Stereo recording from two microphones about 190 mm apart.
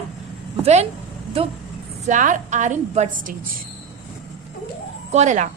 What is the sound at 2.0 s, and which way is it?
A woman's voice, 40° right (ahead or behind).